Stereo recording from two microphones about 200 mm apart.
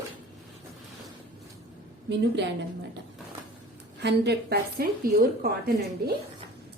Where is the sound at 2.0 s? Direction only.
60° right (ahead or behind).